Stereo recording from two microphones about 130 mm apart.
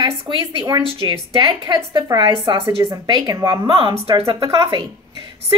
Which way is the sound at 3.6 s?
40° right (ahead or behind).